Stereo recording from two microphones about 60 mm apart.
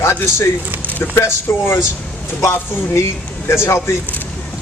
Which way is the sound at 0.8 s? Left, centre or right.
Left.